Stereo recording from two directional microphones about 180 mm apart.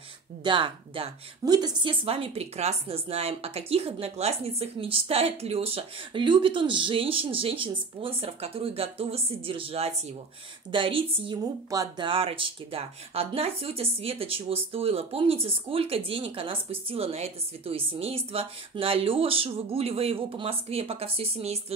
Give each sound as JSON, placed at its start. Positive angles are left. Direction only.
{"t": 0.4, "sound": "speech", "side_deg": -25}